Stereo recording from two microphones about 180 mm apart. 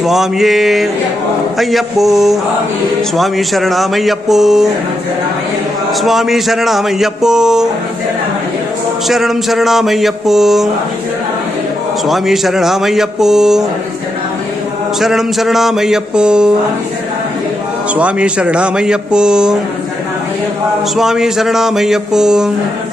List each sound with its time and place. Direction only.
0.0 s speech: centre (ahead or behind)
6.0 s speech: centre (ahead or behind)
9.0 s speech: centre (ahead or behind)
12.0 s speech: centre (ahead or behind)
15.0 s speech: centre (ahead or behind)
17.9 s speech: 5° right (ahead or behind)
20.9 s speech: centre (ahead or behind)